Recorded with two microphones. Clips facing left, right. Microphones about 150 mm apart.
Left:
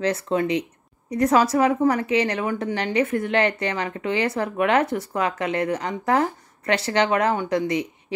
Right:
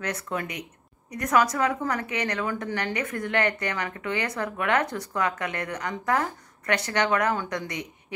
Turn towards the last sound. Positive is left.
turn(degrees=25)  # may be behind; listen again after turning